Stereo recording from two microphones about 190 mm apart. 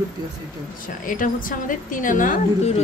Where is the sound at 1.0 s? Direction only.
45° left (ahead or behind).